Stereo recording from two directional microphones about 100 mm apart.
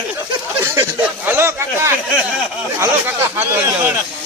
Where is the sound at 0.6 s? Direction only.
20° right (ahead or behind).